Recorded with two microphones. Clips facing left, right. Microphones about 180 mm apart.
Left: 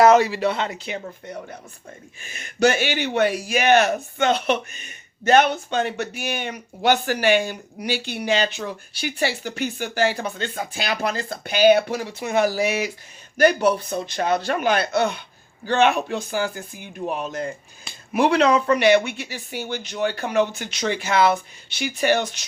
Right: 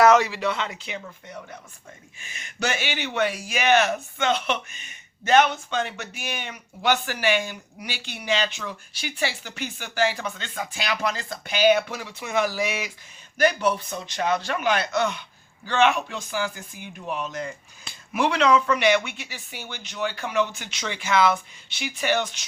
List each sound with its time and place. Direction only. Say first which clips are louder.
0.0 s speech: left 3 dB; 30° left (ahead or behind)
7.2 s speech: left 5 dB; 50° left (ahead or behind)
7.4 s speech: left 7 dB; 35° left (ahead or behind)